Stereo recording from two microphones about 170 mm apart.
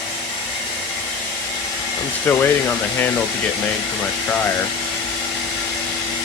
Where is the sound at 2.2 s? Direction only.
10° left (ahead or behind).